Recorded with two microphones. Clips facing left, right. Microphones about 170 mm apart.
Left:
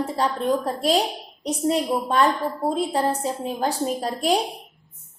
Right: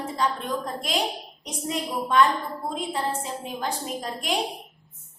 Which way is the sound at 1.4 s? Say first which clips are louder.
Left 8 dB; 35° left (ahead or behind).